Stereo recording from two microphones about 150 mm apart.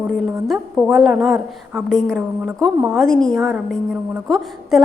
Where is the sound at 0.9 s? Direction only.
Centre (ahead or behind).